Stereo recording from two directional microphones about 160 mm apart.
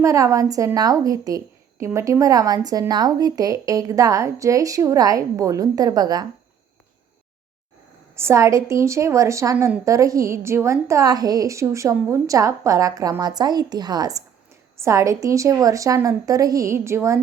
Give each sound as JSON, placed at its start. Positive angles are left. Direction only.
{"t": 0.0, "sound": "a woman's voice", "side_deg": -20}
{"t": 8.1, "sound": "a woman's voice", "side_deg": -15}